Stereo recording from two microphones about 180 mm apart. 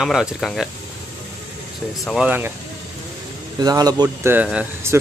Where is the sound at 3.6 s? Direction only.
20° right (ahead or behind).